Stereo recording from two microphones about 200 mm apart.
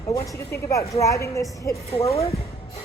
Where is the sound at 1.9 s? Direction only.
30° left (ahead or behind).